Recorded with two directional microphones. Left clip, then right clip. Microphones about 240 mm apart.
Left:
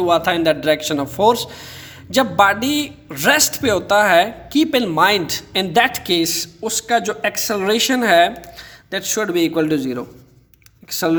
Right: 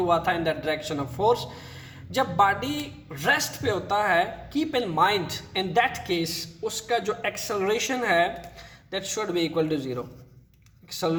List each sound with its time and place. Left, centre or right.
0.0 s a man's voice: left